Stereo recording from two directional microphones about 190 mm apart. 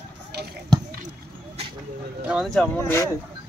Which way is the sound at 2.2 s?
5° right (ahead or behind).